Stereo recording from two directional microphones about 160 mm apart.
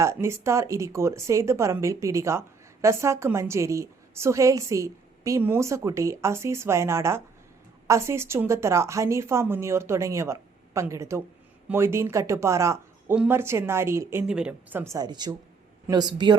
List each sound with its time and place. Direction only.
0.0 s a woman's voice: 15° right (ahead or behind)
14.9 s speech: 25° right (ahead or behind)